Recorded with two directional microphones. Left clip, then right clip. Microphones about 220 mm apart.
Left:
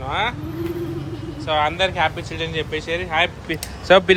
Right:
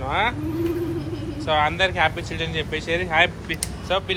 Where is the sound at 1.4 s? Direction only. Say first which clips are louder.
Left 1 dB; 15° left (ahead or behind).